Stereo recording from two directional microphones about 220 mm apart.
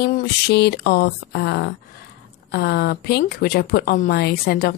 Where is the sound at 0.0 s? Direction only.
50° left (ahead or behind).